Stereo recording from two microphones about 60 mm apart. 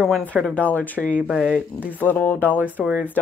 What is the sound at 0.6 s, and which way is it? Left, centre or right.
Speech, left.